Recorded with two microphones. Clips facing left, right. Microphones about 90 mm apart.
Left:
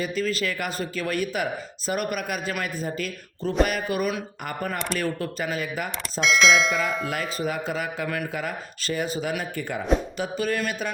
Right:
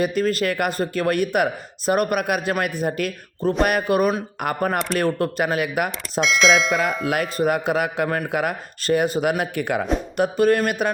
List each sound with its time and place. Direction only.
0.0 s a man's voice: 55° right (ahead or behind)
6.1 s speech: centre (ahead or behind)
7.1 s a man's voice: 60° right (ahead or behind)
9.4 s a man's voice: 70° right (ahead or behind)
10.2 s speech: 50° right (ahead or behind)